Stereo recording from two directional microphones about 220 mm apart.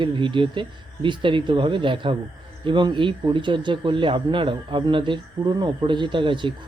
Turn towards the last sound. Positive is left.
turn(degrees=-20)  # may be behind; listen again after turning